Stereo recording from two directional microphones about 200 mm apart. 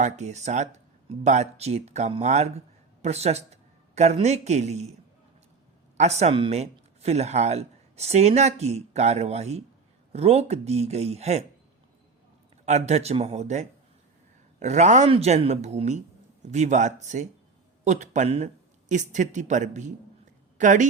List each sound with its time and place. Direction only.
0.0 s speech: 35° right (ahead or behind)
6.0 s speech: 35° right (ahead or behind)
12.6 s speech: 35° right (ahead or behind)